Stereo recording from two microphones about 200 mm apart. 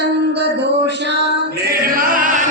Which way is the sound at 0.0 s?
55° right (ahead or behind).